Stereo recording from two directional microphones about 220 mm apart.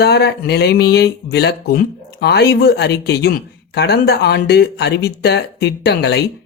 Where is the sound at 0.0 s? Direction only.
50° left (ahead or behind).